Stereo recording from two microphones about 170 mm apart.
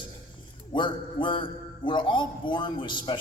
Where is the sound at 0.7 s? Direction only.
30° left (ahead or behind).